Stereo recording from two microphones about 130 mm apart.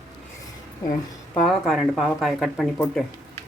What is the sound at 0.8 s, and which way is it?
Speech, 30° left (ahead or behind).